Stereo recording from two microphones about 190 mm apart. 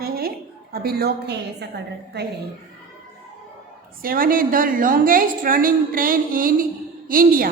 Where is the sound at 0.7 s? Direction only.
55° right (ahead or behind).